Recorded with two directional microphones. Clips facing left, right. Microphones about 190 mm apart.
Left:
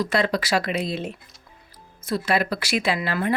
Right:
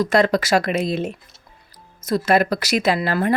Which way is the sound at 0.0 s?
45° right (ahead or behind).